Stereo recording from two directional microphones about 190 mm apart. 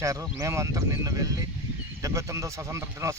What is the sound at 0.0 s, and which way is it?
A man's voice, 15° right (ahead or behind).